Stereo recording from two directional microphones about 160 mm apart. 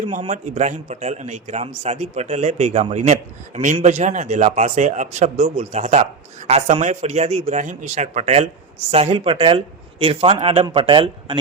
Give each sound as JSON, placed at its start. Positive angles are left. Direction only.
{"t": 0.3, "sound": "a man's voice", "side_deg": -45}